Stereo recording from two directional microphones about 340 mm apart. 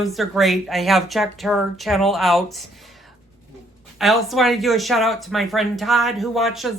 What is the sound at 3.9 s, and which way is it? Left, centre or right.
Speech, centre.